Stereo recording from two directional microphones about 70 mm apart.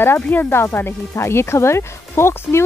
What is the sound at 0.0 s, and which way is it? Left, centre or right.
Speech, left.